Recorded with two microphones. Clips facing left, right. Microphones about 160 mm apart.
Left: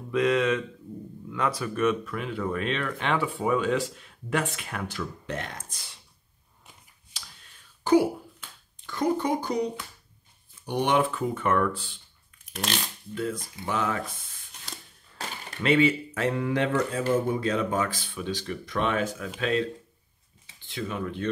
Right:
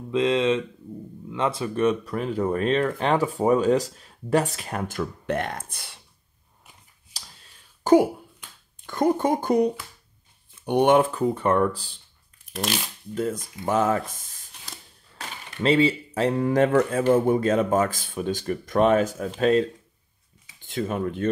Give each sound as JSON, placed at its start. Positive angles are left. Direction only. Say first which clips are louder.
{"t": 0.1, "sound": "speech", "louder": "right 2 dB", "side_deg": -25}
{"t": 7.8, "sound": "speech", "louder": "right 4 dB", "side_deg": -45}
{"t": 12.4, "sound": "shuffling cards", "louder": "right 4 dB", "side_deg": 0}
{"t": 13.1, "sound": "speech", "louder": "right 4 dB", "side_deg": -45}
{"t": 15.6, "sound": "speech", "louder": "right 2 dB", "side_deg": -30}
{"t": 20.6, "sound": "speech", "louder": "right 5 dB", "side_deg": -45}